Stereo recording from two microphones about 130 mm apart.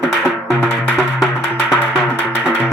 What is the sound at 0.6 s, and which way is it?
Music, 10° right (ahead or behind).